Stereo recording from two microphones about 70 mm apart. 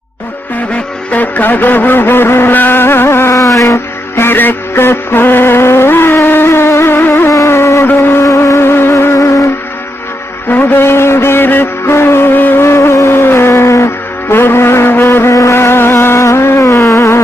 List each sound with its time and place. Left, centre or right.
1.1 s vehicle: left
3.3 s a sound: left
4.1 s music: left
8.2 s music: left
10.5 s music: left